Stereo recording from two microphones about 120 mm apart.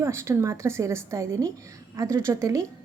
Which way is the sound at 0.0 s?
25° right (ahead or behind).